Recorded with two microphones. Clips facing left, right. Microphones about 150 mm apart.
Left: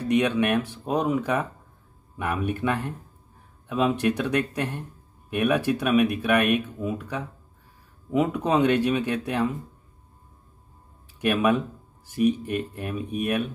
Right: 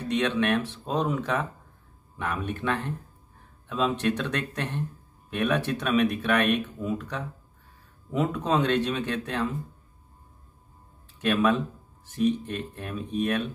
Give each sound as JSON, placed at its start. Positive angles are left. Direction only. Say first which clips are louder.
{"t": 0.1, "sound": "speech", "louder": "left 3 dB", "side_deg": 10}
{"t": 11.1, "sound": "speech", "louder": "left 1 dB", "side_deg": 10}